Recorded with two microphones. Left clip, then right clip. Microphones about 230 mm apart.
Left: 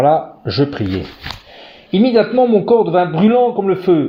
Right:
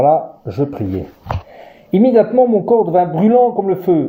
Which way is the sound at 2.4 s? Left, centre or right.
Left.